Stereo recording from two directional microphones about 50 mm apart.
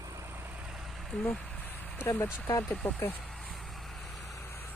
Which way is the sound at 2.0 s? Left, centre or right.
Left.